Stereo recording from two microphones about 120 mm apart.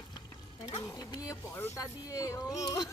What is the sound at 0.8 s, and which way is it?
Speech, 25° left (ahead or behind).